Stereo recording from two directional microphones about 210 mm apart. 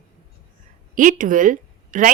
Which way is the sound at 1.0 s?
40° right (ahead or behind).